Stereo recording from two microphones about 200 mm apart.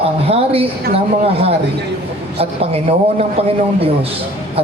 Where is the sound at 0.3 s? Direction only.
30° right (ahead or behind).